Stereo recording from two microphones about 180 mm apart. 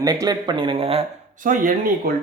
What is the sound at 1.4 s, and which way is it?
Speech, 45° right (ahead or behind).